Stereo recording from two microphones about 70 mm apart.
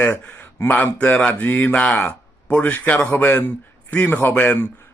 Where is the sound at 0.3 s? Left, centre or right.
Left.